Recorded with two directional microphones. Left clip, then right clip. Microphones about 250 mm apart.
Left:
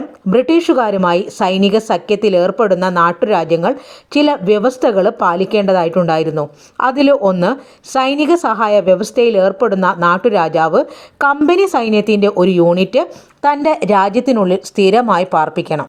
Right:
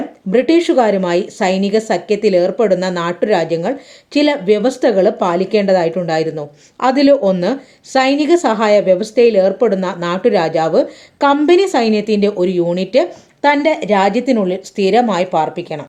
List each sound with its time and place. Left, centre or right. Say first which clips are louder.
0.3 s speech: left 1 dB; left